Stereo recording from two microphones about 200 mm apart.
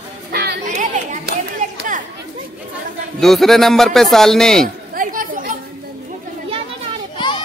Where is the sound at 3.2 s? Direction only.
Centre (ahead or behind).